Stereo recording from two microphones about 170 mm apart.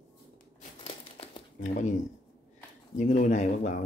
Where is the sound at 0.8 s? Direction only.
35° left (ahead or behind).